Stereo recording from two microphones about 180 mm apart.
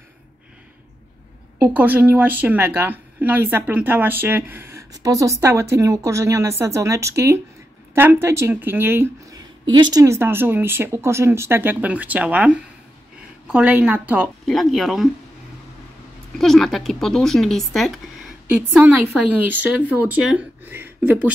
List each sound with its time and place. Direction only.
1.6 s a woman's voice: 10° right (ahead or behind)
9.7 s a woman's voice: 25° right (ahead or behind); by 15.0 s centre (ahead or behind)
16.3 s a woman's voice: centre (ahead or behind)